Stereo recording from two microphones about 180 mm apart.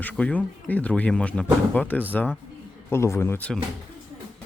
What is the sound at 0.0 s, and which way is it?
Speech, 5° left (ahead or behind).